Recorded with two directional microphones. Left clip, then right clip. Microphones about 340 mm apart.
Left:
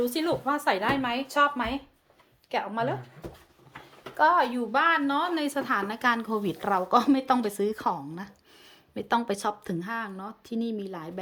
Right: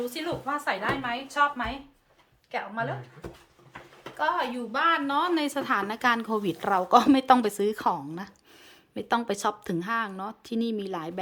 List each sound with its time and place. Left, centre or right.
0.0 s a woman's voice: centre
4.2 s a woman's voice: centre